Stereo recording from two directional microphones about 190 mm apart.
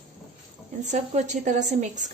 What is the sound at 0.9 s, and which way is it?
A woman's voice, 40° right (ahead or behind).